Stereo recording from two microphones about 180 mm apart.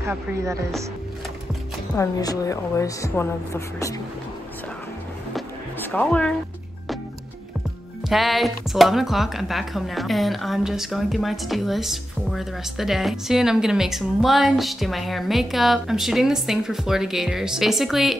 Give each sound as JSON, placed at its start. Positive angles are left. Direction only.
{"t": 0.0, "sound": "speech", "side_deg": -15}
{"t": 2.0, "sound": "a woman's voice", "side_deg": 20}
{"t": 5.8, "sound": "speech", "side_deg": 10}
{"t": 8.1, "sound": "speech", "side_deg": 0}